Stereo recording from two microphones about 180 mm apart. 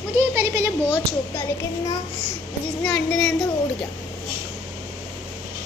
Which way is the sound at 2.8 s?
5° left (ahead or behind).